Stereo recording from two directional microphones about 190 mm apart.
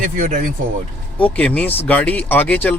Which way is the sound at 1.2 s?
5° left (ahead or behind).